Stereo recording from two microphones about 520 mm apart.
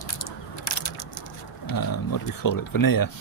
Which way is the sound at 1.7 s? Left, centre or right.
Left.